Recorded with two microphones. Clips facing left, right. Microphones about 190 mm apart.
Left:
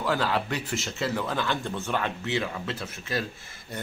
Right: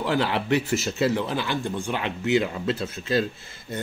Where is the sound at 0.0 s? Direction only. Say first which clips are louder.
Right 2 dB; 20° right (ahead or behind).